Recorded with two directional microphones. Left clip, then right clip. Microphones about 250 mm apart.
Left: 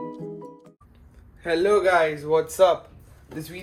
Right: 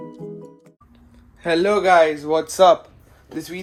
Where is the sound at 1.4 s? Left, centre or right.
Right.